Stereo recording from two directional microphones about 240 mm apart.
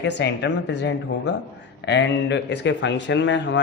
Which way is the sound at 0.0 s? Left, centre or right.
Left.